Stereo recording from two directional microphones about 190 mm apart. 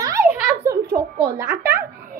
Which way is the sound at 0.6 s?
15° right (ahead or behind).